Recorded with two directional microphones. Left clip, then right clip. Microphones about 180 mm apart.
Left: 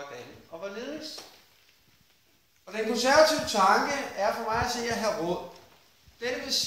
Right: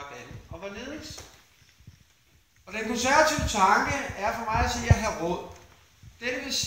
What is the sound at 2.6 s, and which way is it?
Speech, 20° left (ahead or behind).